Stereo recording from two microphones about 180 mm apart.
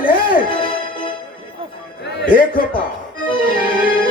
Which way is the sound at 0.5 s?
30° left (ahead or behind).